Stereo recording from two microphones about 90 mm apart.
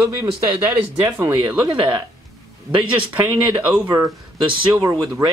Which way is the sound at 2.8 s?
20° right (ahead or behind).